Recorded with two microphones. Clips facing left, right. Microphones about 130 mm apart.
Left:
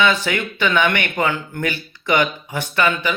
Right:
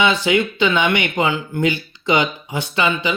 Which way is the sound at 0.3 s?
15° right (ahead or behind).